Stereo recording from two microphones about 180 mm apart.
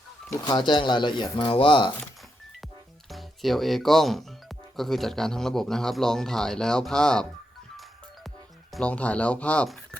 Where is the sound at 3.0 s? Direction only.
Centre (ahead or behind).